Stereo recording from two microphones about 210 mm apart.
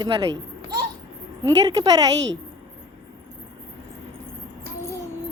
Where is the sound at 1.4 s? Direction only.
20° right (ahead or behind).